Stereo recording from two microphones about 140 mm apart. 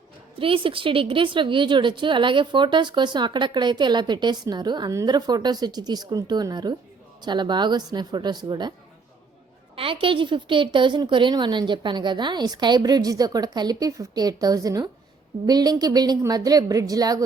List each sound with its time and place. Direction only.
0.3 s a woman's voice: 40° right (ahead or behind)
9.7 s a woman's voice: 40° right (ahead or behind)